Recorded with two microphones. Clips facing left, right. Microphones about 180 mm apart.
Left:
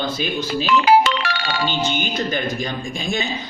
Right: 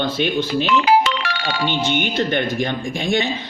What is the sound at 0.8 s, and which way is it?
Music, 45° left (ahead or behind).